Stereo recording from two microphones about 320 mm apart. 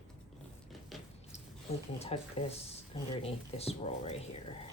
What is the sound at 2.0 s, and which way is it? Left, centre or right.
Speech, centre.